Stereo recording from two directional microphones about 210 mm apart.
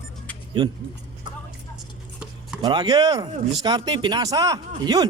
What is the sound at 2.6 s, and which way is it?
Speech, 20° right (ahead or behind).